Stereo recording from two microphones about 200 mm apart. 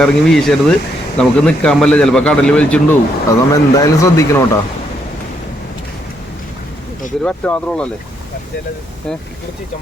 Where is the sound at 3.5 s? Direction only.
15° left (ahead or behind).